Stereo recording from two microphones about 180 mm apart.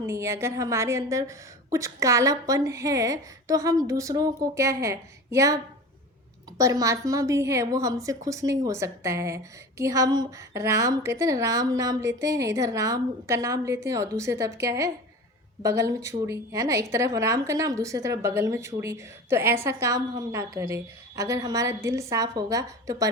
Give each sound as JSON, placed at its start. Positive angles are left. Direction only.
{"t": 0.0, "sound": "a woman's voice", "side_deg": -15}
{"t": 6.6, "sound": "a woman's voice", "side_deg": -15}